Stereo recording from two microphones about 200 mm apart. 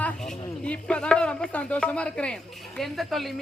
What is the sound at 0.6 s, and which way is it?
Speech, 5° left (ahead or behind).